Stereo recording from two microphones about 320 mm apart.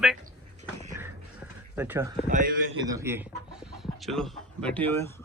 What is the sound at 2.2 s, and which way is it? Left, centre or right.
Speech, right.